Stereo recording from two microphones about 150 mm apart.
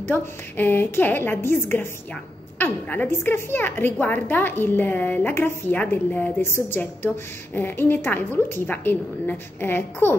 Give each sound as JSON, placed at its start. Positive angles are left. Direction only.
{"t": 0.0, "sound": "a woman's voice", "side_deg": 15}